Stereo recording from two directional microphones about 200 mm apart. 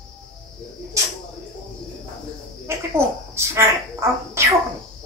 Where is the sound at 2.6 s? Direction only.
15° right (ahead or behind).